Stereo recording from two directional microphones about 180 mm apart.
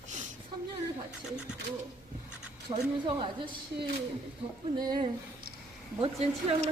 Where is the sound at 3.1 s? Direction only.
30° right (ahead or behind).